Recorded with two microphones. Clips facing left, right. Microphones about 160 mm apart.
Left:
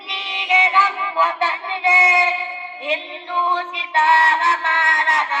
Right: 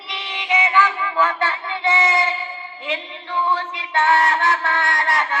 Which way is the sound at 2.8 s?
25° left (ahead or behind).